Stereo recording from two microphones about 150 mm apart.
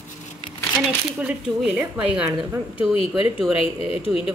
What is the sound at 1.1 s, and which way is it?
Speech, 5° right (ahead or behind).